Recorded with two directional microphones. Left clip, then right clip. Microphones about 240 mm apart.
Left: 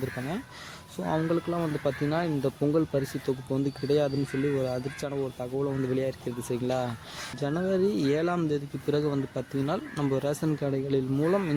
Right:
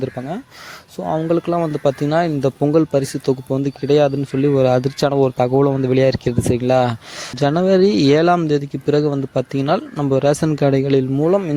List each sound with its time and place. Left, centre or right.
1.3 s speech: right